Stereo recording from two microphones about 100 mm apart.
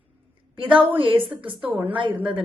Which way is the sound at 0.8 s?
60° right (ahead or behind).